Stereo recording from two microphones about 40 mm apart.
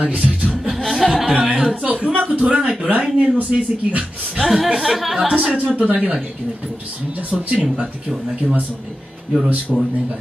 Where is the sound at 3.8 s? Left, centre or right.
Right.